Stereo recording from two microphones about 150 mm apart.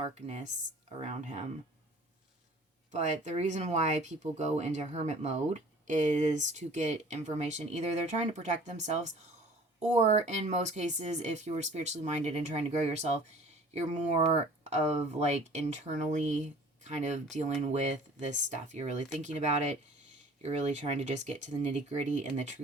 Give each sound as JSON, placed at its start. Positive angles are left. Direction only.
{"t": 0.0, "sound": "speech", "side_deg": -50}
{"t": 2.9, "sound": "speech", "side_deg": -50}